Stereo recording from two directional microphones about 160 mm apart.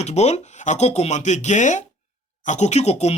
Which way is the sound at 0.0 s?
45° left (ahead or behind).